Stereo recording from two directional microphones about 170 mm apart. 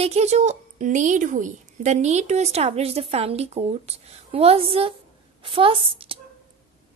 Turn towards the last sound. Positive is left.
turn(degrees=-30)  # may be behind; listen again after turning